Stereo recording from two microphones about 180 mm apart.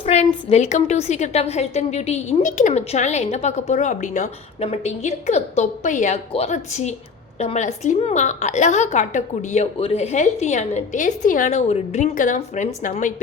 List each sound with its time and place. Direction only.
0.0 s a woman's voice: 35° left (ahead or behind)